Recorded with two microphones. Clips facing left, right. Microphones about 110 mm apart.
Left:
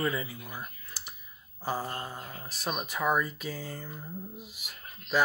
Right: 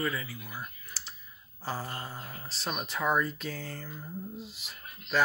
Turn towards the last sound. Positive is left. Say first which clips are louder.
# left 1 dB
turn(degrees=10)  # may be behind; listen again after turning